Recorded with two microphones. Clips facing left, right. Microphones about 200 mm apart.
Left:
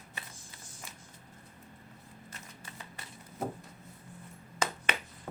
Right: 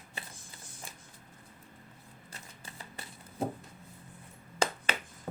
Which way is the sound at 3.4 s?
30° right (ahead or behind).